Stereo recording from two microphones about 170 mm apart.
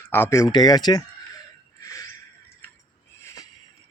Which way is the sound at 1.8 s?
20° left (ahead or behind).